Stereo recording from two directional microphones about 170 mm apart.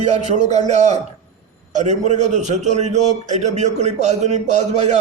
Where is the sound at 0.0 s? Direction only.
45° right (ahead or behind).